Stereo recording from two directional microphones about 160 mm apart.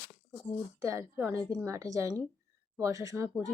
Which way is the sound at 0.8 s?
20° right (ahead or behind).